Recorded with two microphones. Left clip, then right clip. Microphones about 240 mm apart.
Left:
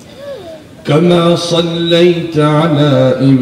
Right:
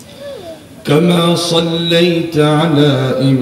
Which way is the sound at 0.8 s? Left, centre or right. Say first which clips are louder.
Left 2 dB; right.